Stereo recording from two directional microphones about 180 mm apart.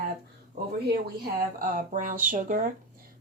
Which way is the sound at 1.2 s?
50° right (ahead or behind).